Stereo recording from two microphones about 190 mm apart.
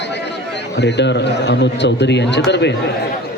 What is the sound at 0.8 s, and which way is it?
A man's voice, 65° left (ahead or behind).